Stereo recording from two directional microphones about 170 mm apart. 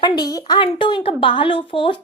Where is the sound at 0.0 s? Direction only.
25° left (ahead or behind).